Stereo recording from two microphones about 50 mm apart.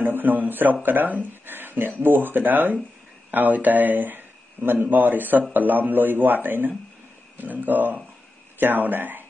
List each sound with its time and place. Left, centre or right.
0.0 s a man's voice: right